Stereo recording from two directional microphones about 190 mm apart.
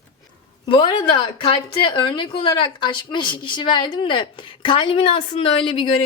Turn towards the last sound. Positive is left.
turn(degrees=25)  # may be behind; listen again after turning